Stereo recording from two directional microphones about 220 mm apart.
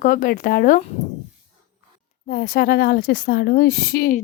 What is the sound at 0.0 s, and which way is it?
Speech, 40° left (ahead or behind).